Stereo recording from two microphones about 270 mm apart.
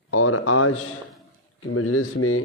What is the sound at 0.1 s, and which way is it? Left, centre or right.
A man's voice, left.